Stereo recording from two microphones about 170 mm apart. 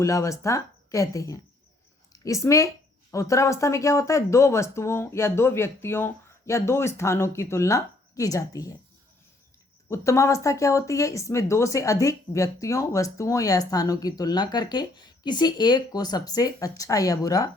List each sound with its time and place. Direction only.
0.0 s speech: 20° left (ahead or behind)
9.9 s speech: 15° left (ahead or behind)